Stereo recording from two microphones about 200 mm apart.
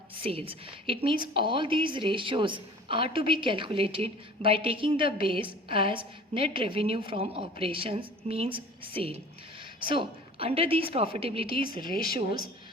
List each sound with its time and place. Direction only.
0.2 s a woman's voice: 25° right (ahead or behind)
11.9 s speech: 45° left (ahead or behind)